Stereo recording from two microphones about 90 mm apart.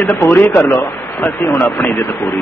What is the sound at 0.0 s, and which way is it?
A man's voice, 25° left (ahead or behind).